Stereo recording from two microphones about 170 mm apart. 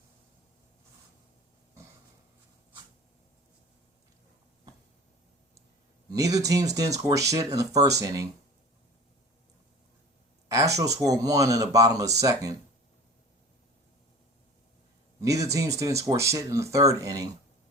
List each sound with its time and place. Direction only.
6.1 s speech: 20° right (ahead or behind)
10.5 s speech: 20° right (ahead or behind)
15.2 s speech: 20° right (ahead or behind)